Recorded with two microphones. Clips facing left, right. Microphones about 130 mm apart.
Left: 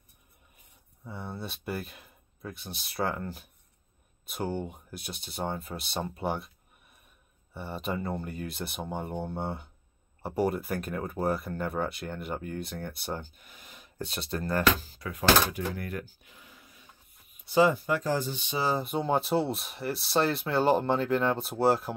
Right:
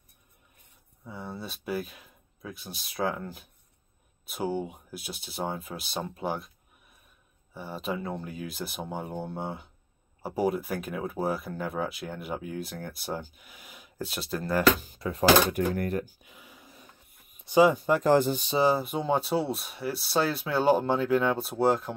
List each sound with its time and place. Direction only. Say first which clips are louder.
1.0 s speech: even; centre (ahead or behind)
7.5 s speech: even; centre (ahead or behind)
15.0 s speech: right 6 dB; 30° right (ahead or behind)
15.5 s speech: right 7 dB; 50° right (ahead or behind)
16.3 s a sound: right 3 dB; 15° right (ahead or behind)
17.5 s speech: right 3 dB; 15° right (ahead or behind)
18.0 s speech: right 8 dB; 60° right (ahead or behind)
18.8 s speech: even; centre (ahead or behind)